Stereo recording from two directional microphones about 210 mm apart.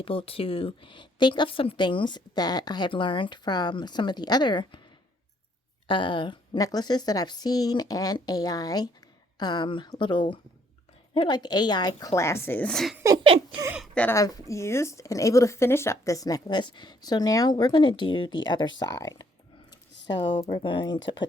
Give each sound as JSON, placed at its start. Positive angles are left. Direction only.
{"t": 0.0, "sound": "a woman's voice", "side_deg": 25}
{"t": 5.9, "sound": "a woman's voice", "side_deg": 25}
{"t": 13.6, "sound": "speech", "side_deg": -10}
{"t": 13.9, "sound": "speech", "side_deg": 10}
{"t": 19.9, "sound": "a sound", "side_deg": 55}
{"t": 20.1, "sound": "a woman's voice", "side_deg": 25}